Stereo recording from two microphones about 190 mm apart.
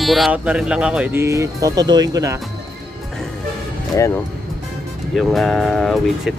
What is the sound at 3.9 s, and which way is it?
Speech, 15° left (ahead or behind).